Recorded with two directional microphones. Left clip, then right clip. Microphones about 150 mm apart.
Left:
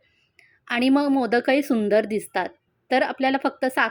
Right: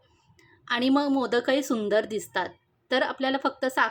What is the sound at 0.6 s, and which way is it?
Speech, 25° left (ahead or behind).